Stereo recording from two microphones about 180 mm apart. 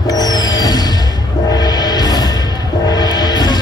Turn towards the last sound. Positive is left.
turn(degrees=20)  # may be behind; listen again after turning